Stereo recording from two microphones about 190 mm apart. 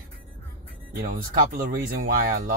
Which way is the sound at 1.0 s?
45° right (ahead or behind).